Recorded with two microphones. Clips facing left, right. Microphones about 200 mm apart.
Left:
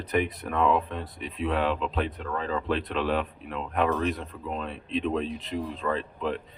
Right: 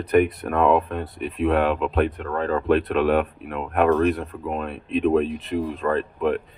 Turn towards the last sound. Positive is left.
turn(degrees=-60)  # may be behind; listen again after turning